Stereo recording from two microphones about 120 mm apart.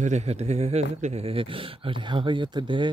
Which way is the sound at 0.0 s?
70° right (ahead or behind).